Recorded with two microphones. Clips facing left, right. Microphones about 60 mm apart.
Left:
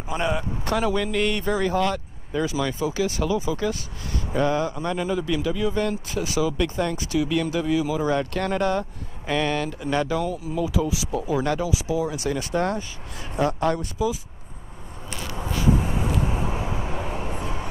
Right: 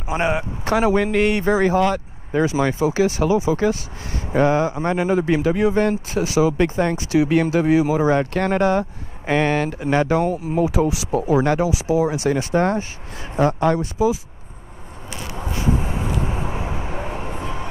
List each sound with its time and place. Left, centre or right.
0.7 s a man's voice: right
1.3 s speech: right
4.8 s a man's voice: right
6.8 s a man's voice: right
9.3 s a man's voice: right
10.6 s a man's voice: right
13.4 s speech: centre
15.1 s a sound: right
15.6 s vehicle: right